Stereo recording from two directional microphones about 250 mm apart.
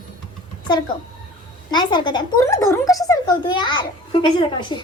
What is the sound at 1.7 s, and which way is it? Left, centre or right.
A woman's voice, centre.